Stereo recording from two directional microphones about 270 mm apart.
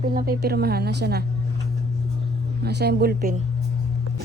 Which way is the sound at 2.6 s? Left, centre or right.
Right.